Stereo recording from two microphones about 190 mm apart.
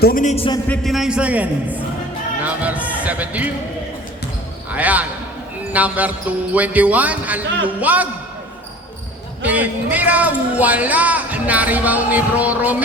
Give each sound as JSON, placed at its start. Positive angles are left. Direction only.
{"t": 0.0, "sound": "a man's voice", "side_deg": 45}
{"t": 0.7, "sound": "a man's voice", "side_deg": 0}
{"t": 4.7, "sound": "speech", "side_deg": -10}
{"t": 9.4, "sound": "speech", "side_deg": -10}